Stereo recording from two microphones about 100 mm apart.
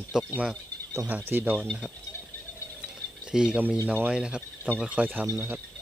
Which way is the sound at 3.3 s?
10° right (ahead or behind).